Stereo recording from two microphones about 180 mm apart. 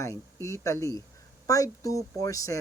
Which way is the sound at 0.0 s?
15° left (ahead or behind).